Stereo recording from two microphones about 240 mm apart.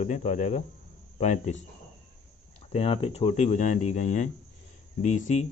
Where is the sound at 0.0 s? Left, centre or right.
Left.